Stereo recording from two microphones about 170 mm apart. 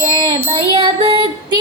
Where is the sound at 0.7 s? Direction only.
30° right (ahead or behind).